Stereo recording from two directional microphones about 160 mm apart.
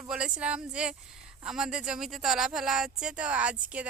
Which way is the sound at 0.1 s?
5° right (ahead or behind).